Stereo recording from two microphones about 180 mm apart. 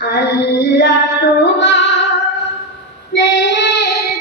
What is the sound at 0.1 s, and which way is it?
Female singing, 70° left (ahead or behind).